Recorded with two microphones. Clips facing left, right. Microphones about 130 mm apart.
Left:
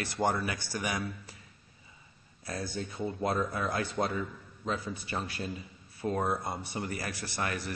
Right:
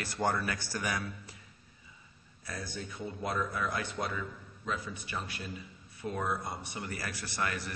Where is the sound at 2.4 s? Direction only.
30° left (ahead or behind).